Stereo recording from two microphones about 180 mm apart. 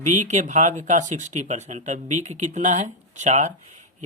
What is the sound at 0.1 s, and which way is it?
Speech, 40° right (ahead or behind).